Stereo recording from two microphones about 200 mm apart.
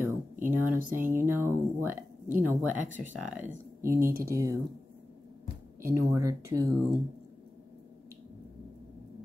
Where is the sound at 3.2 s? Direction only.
10° right (ahead or behind).